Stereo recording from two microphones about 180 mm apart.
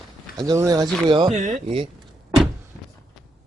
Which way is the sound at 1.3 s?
40° right (ahead or behind).